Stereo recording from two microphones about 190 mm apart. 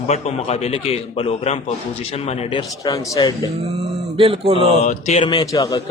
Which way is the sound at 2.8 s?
20° left (ahead or behind).